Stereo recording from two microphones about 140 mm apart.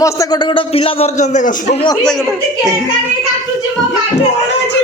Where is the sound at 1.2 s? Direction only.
60° left (ahead or behind).